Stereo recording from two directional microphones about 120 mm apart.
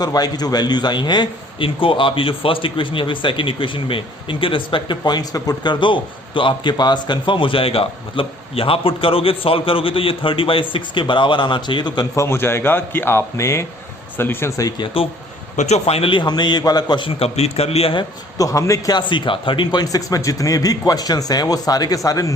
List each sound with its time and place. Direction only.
0.0 s a man's voice: 35° left (ahead or behind)
12.1 s a man's voice: 20° left (ahead or behind)
15.0 s a man's voice: 50° left (ahead or behind)
15.5 s speech: 65° left (ahead or behind); by 17.1 s 35° left (ahead or behind)
17.2 s a man's voice: 60° left (ahead or behind)
18.3 s a man's voice: 30° left (ahead or behind)
18.9 s speech: 40° left (ahead or behind)